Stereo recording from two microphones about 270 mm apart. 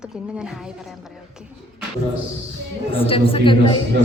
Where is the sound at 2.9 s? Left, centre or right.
Centre.